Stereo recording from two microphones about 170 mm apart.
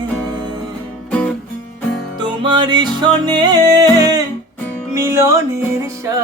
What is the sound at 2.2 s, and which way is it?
Music, 25° right (ahead or behind).